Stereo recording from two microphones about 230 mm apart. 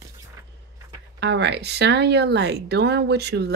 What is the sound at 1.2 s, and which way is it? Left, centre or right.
Speech, right.